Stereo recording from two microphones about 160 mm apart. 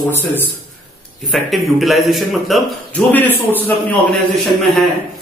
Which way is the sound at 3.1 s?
10° left (ahead or behind).